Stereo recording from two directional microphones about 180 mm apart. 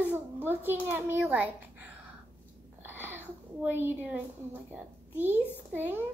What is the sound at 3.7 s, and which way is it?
A child's voice, 10° right (ahead or behind).